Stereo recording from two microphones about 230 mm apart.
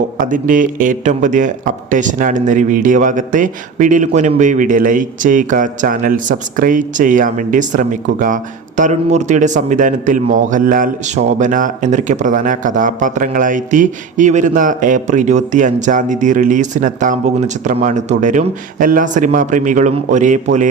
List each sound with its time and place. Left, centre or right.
0.2 s a man's voice: right